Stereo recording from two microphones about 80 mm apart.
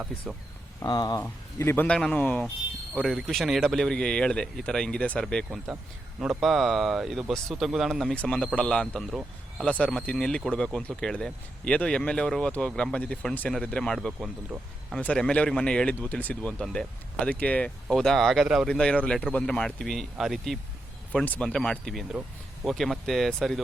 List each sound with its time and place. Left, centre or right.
0.8 s speech: left
1.2 s a man's voice: left
1.9 s a man's voice: centre
3.0 s a man's voice: centre
5.7 s speech: centre
8.1 s a man's voice: centre
14.5 s speech: right
15.0 s a man's voice: centre
17.9 s speech: centre
18.7 s a man's voice: centre
21.2 s a man's voice: centre